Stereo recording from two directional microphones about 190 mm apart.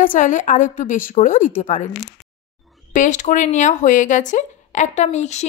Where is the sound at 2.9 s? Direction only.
40° left (ahead or behind).